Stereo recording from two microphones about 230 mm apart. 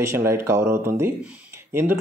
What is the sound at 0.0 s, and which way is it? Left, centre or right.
Speech, centre.